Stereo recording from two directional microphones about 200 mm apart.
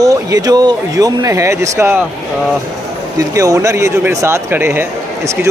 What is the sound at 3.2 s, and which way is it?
A man's voice, 15° right (ahead or behind).